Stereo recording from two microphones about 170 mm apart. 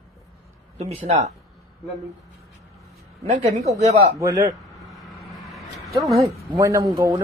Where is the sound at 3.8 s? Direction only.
40° right (ahead or behind).